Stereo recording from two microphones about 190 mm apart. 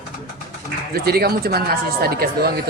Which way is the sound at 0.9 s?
55° right (ahead or behind).